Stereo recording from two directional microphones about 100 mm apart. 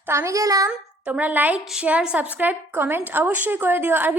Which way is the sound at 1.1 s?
15° right (ahead or behind).